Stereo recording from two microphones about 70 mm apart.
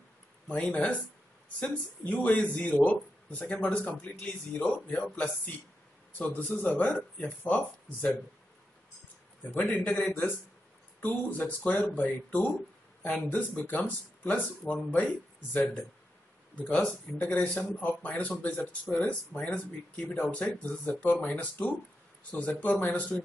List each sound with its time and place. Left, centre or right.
0.5 s speech: left
9.5 s speech: left